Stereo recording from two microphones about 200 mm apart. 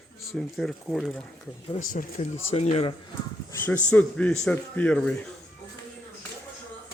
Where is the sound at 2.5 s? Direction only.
30° left (ahead or behind).